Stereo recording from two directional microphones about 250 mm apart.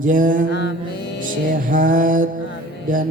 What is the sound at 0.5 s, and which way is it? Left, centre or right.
Mantra, left.